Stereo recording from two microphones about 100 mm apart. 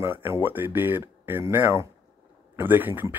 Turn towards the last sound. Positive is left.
turn(degrees=-20)  # may be behind; listen again after turning